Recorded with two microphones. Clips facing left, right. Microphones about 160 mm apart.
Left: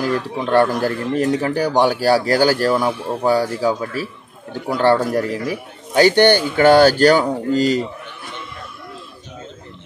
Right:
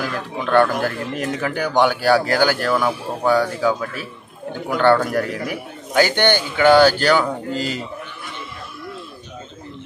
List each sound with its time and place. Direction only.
0.0 s speech: 35° left (ahead or behind)